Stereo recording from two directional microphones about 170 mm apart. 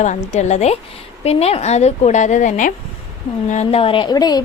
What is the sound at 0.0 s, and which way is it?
A woman's voice, 45° left (ahead or behind).